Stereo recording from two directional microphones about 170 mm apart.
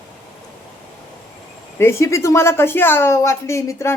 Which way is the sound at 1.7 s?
15° left (ahead or behind).